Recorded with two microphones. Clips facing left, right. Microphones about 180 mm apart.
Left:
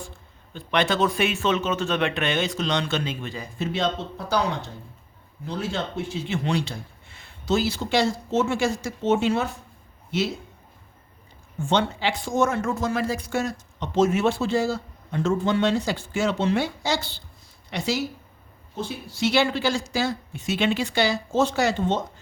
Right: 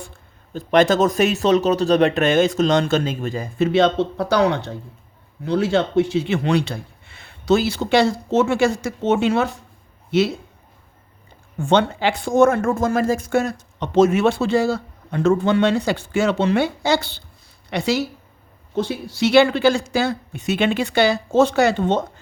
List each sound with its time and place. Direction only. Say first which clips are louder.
0.5 s speech: right 8 dB; 45° right (ahead or behind)
3.6 s speech: right 10 dB; 70° right (ahead or behind)
11.6 s speech: right 6 dB; 60° right (ahead or behind)
18.8 s speech: right 6 dB; 80° right; by 22.0 s 60° right (ahead or behind)